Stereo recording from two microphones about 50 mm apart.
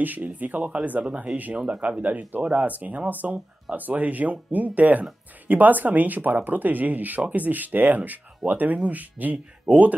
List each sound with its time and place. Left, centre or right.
0.0 s speech: right